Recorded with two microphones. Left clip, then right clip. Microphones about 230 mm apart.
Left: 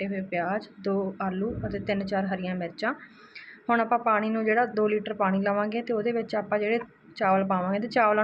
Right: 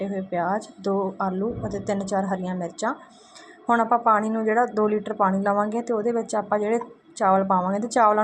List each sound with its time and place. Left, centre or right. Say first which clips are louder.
0.0 s speech: right 4 dB; centre
1.9 s a woman's voice: right 3 dB; centre
3.7 s speech: right 4 dB; centre